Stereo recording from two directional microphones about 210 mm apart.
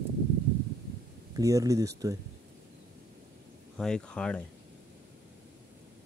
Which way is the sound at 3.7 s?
5° left (ahead or behind).